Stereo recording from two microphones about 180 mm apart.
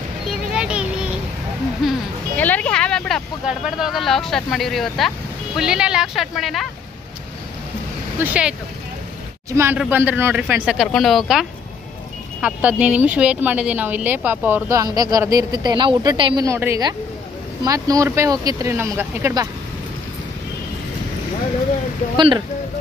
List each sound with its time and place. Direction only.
0.5 s a sound: 5° right (ahead or behind)
1.8 s music: centre (ahead or behind)
2.3 s speech: 10° left (ahead or behind)
8.2 s speech: 5° right (ahead or behind)
22.1 s speech: 25° right (ahead or behind)